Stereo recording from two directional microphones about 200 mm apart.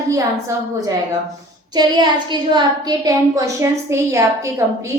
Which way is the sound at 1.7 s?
20° right (ahead or behind).